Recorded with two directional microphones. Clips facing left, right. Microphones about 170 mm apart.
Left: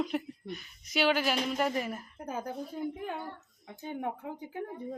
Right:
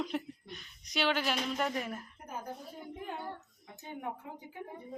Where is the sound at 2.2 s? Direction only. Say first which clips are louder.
Left 7 dB; 85° left.